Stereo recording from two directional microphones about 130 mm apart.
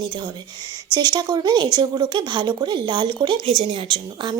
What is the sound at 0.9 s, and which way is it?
Speech, 35° right (ahead or behind).